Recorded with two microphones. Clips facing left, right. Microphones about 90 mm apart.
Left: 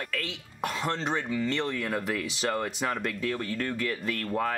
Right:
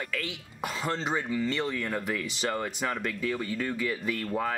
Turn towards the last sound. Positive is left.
turn(degrees=-5)  # may be behind; listen again after turning